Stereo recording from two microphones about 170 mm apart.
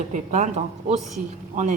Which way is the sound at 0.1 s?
45° right (ahead or behind).